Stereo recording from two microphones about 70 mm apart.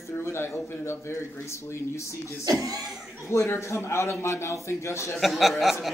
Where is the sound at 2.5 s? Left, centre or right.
Right.